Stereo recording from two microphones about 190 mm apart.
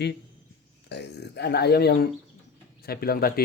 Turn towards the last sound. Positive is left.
turn(degrees=55)  # may be behind; listen again after turning